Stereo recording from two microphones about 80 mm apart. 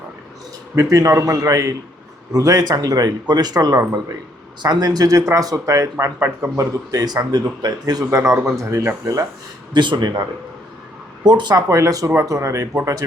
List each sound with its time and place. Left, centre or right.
0.8 s a man's voice: right
8.4 s speech: right
9.7 s speech: right
11.2 s a man's voice: right
11.7 s speech: right